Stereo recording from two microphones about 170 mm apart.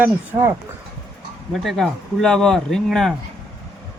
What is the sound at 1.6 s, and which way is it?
Speech, centre (ahead or behind).